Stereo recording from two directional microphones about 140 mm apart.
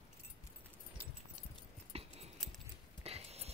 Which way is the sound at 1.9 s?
45° right (ahead or behind).